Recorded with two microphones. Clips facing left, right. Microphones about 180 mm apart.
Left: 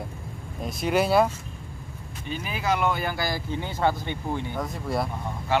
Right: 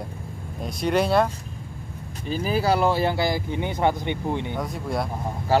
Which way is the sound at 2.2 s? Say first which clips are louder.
Right 6 dB; 35° right (ahead or behind).